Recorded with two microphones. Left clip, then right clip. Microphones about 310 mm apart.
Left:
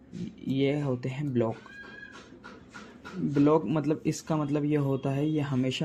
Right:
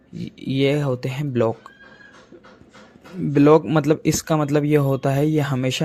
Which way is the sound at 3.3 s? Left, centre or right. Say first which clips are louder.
Right 10 dB; right.